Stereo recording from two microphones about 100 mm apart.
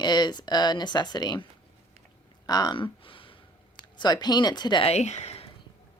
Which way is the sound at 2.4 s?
45° left (ahead or behind).